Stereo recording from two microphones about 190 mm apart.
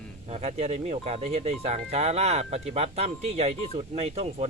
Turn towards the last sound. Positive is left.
turn(degrees=-35)  # may be behind; listen again after turning